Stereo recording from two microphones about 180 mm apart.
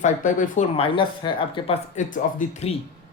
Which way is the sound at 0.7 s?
30° left (ahead or behind).